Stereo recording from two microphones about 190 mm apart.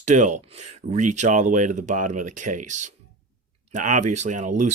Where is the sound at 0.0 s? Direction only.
40° right (ahead or behind).